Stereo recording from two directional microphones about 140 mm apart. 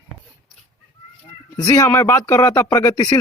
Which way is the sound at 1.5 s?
25° left (ahead or behind).